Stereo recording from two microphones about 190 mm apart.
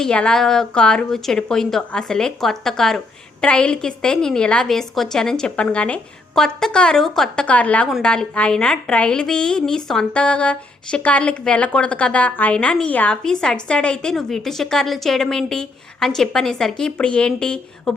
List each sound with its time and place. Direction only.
0.0 s a woman's voice: 5° left (ahead or behind)